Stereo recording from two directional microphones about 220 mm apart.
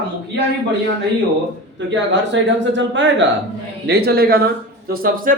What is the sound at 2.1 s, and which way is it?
A man's voice, 55° right (ahead or behind).